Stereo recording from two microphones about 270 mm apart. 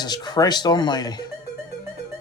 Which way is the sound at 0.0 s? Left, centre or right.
Centre.